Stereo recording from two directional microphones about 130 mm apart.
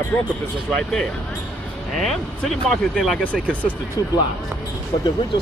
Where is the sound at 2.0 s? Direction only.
Centre (ahead or behind).